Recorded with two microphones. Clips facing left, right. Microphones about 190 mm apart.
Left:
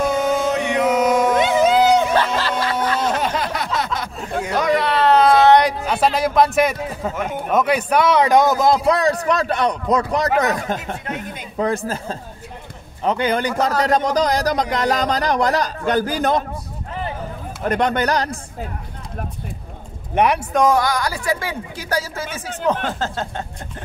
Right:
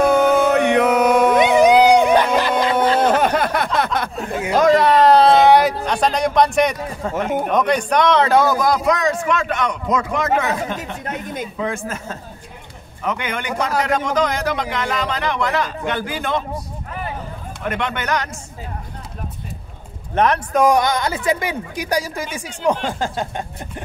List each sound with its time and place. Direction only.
0.0 s music: 60° right (ahead or behind)
1.4 s a sound: 15° right (ahead or behind)
3.0 s a sound: 55° right (ahead or behind)
4.6 s speech: 45° right (ahead or behind)
5.4 s a man's voice: 5° right (ahead or behind); by 16.4 s 40° left (ahead or behind)
17.6 s a man's voice: 40° left (ahead or behind)
20.2 s a man's voice: 10° left (ahead or behind)
20.5 s a woman's voice: 10° right (ahead or behind)
20.8 s a woman's voice: 20° right (ahead or behind)